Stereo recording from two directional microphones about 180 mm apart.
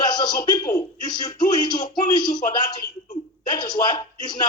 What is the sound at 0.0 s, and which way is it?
A man's voice, 25° left (ahead or behind).